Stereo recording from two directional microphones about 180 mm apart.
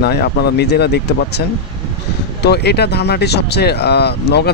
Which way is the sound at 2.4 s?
65° left (ahead or behind).